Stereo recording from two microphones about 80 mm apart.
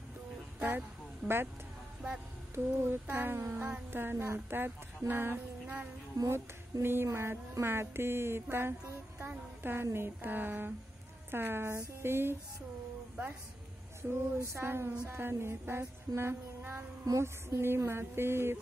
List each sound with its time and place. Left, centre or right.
0.6 s vehicle: right
2.5 s speech: right
9.2 s music: right
9.9 s speech: right
14.4 s speech: right
16.2 s female singing: right
17.2 s speech: right